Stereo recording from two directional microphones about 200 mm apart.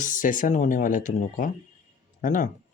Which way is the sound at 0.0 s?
40° left (ahead or behind).